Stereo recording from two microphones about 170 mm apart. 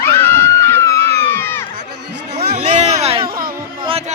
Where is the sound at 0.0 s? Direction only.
10° left (ahead or behind).